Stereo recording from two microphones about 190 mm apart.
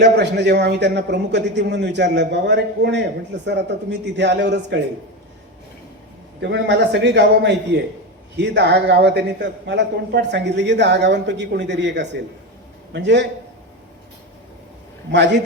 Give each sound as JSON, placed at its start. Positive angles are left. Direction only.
{"t": 0.0, "sound": "a man's voice", "side_deg": -65}
{"t": 6.4, "sound": "a man's voice", "side_deg": -65}
{"t": 15.1, "sound": "a man's voice", "side_deg": -65}